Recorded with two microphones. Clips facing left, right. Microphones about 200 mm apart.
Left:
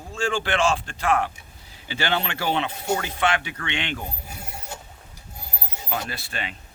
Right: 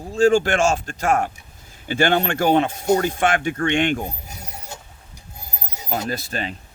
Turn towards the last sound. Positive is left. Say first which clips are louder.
# right 7 dB
turn(degrees=-40)  # may be behind; listen again after turning